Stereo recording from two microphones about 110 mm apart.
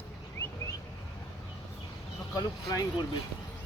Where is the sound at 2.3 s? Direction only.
30° left (ahead or behind).